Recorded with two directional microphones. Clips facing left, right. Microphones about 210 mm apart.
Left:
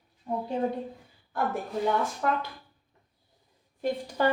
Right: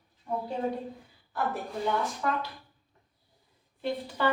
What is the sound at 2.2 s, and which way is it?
Speech, 50° left (ahead or behind).